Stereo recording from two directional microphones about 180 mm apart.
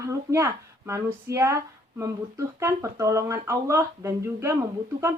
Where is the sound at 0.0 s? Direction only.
15° right (ahead or behind).